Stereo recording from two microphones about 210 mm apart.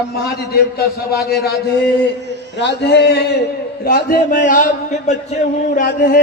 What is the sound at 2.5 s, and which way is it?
A man's voice, 55° left (ahead or behind).